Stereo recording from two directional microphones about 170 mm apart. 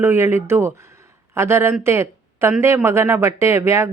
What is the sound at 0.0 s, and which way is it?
Speech, 15° right (ahead or behind).